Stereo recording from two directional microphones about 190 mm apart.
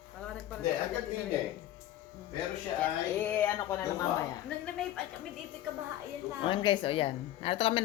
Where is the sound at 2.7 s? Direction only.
10° left (ahead or behind).